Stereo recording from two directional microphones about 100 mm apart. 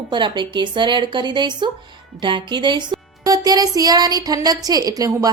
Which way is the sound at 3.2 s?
40° right (ahead or behind).